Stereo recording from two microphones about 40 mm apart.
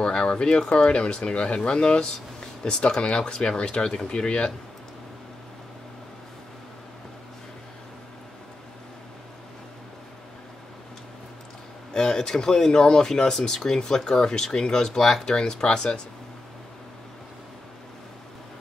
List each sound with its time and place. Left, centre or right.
0.0 s speech: left
11.9 s speech: centre